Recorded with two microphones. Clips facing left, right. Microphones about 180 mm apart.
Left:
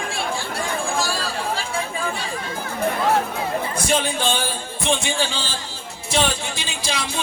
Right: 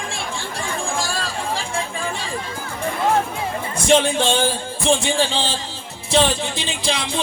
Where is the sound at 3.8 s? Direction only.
30° right (ahead or behind).